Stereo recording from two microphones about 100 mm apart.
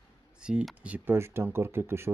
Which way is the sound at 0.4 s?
10° right (ahead or behind).